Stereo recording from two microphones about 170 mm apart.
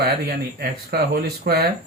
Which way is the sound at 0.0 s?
65° right (ahead or behind).